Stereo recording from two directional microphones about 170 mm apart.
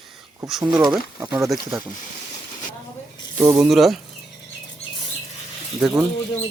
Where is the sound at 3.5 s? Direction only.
5° right (ahead or behind).